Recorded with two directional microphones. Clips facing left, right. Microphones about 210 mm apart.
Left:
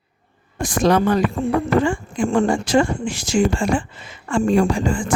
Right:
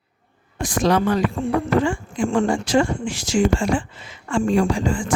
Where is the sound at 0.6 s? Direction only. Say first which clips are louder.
Left 2 dB; 45° left (ahead or behind).